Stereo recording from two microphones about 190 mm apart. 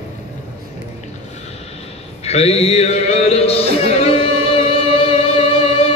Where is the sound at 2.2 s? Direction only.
35° left (ahead or behind).